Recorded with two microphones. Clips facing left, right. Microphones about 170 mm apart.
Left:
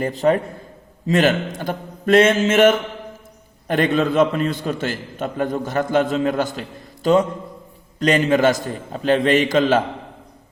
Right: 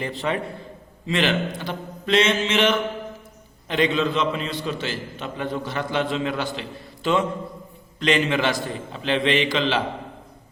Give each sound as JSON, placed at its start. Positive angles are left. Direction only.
{"t": 0.0, "sound": "a man's voice", "side_deg": 45}